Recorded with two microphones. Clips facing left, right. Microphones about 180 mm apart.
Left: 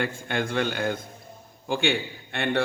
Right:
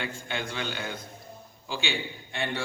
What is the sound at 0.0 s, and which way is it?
A man's voice, 55° left (ahead or behind).